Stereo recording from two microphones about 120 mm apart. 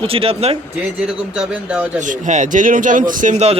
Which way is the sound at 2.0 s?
90° right.